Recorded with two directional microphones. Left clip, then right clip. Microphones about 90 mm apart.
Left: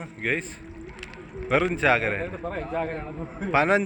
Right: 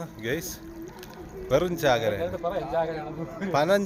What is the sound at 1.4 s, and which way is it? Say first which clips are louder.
Speech: left 1 dB; 20° right (ahead or behind).